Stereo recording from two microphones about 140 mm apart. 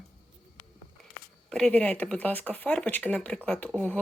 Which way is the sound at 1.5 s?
5° left (ahead or behind).